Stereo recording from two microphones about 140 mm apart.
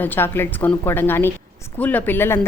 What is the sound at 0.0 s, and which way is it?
Speech, 15° left (ahead or behind).